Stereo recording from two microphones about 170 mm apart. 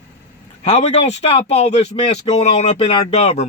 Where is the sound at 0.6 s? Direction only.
40° left (ahead or behind).